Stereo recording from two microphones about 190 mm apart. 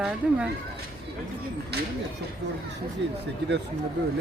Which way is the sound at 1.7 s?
60° right (ahead or behind).